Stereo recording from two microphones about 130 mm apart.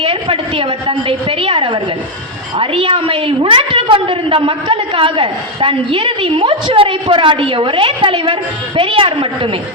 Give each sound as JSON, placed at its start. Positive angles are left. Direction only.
{"t": 0.0, "sound": "a woman's voice", "side_deg": -45}